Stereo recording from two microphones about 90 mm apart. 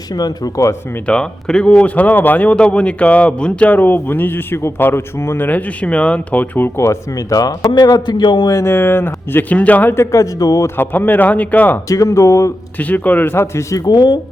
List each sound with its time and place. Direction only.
0.1 s speech: 45° left (ahead or behind)
1.0 s a man's voice: 10° left (ahead or behind)
6.7 s a man's voice: 35° left (ahead or behind); by 8.4 s 60° left (ahead or behind)
8.4 s speech: 30° left (ahead or behind)
10.8 s speech: 20° left (ahead or behind)
11.9 s speech: 35° left (ahead or behind)
12.8 s speech: 15° left (ahead or behind); by 13.8 s 35° left (ahead or behind)
13.8 s speech: 50° left (ahead or behind)